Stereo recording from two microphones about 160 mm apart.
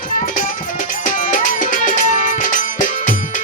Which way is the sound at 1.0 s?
55° left (ahead or behind).